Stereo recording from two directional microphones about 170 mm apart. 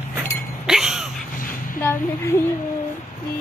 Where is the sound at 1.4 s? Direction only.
55° left (ahead or behind).